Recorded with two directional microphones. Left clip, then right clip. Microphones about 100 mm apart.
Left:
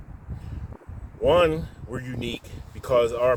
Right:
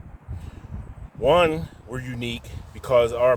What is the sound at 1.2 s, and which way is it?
Speech, 55° right (ahead or behind).